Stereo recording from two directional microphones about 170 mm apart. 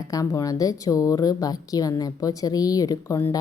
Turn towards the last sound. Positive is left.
turn(degrees=20)  # may be behind; listen again after turning